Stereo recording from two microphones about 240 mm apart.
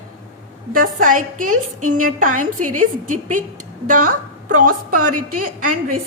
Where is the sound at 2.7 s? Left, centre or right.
Right.